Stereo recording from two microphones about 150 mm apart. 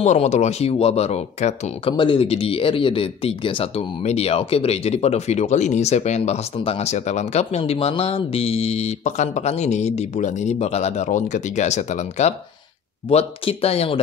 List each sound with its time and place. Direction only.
0.0 s speech: 50° left (ahead or behind)